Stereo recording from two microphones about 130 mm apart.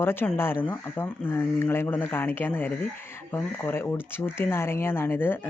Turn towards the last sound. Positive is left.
turn(degrees=15)  # may be behind; listen again after turning